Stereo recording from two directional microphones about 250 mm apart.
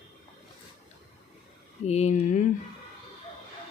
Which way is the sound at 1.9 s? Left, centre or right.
Left.